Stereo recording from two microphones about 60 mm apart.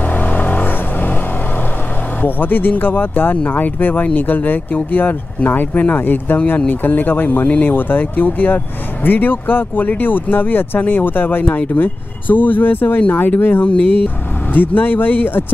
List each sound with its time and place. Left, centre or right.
0.1 s vehicle: left
2.2 s speech: left